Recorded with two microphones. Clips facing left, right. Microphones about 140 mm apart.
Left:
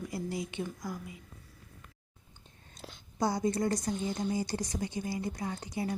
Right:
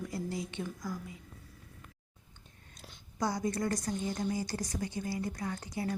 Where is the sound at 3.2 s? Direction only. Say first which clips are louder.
Left 3 dB; 25° left (ahead or behind).